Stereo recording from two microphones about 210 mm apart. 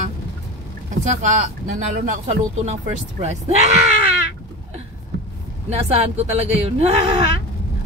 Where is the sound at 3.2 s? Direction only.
35° right (ahead or behind).